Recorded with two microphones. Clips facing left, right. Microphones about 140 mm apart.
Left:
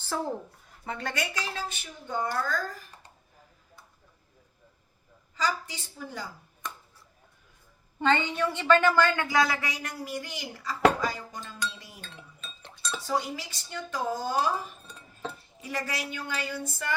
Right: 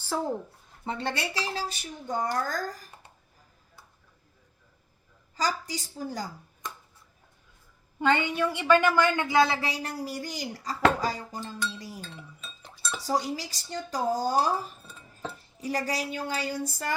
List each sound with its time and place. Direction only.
0.9 s speech: 30° right (ahead or behind)
5.4 s speech: 40° right (ahead or behind)
8.0 s a woman's voice: 10° right (ahead or behind); by 11.3 s 35° right (ahead or behind)
11.6 s a sound: 35° right (ahead or behind)
11.9 s dishes: 5° right (ahead or behind)
13.0 s speech: 35° right (ahead or behind)